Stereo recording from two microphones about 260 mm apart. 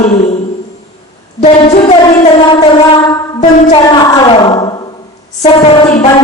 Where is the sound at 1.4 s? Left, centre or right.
Left.